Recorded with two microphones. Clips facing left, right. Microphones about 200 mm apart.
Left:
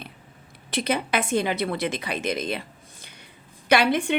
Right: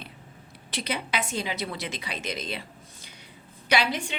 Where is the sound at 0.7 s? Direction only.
50° left (ahead or behind).